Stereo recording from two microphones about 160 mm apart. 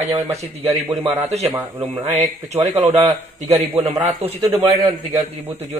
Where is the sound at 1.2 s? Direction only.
40° right (ahead or behind).